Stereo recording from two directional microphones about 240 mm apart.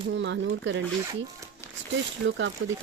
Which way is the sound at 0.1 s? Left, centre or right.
Right.